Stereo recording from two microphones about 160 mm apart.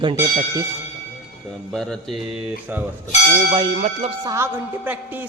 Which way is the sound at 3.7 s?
45° right (ahead or behind).